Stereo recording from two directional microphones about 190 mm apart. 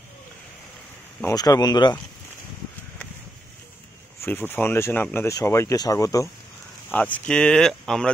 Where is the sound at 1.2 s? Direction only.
20° left (ahead or behind).